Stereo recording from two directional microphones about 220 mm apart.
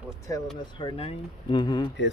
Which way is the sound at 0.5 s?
20° left (ahead or behind).